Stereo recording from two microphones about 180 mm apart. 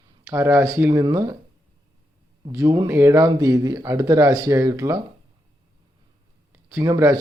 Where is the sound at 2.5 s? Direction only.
15° right (ahead or behind).